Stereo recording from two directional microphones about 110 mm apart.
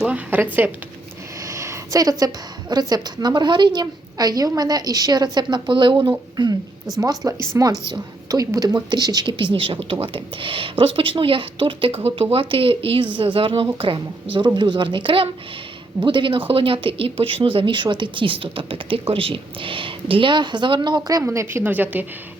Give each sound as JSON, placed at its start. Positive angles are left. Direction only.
{"t": 0.0, "sound": "speech", "side_deg": -15}
{"t": 1.5, "sound": "a woman's voice", "side_deg": -25}